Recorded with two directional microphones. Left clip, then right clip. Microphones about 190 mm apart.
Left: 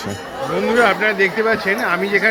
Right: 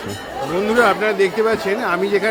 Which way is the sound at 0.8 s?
15° right (ahead or behind).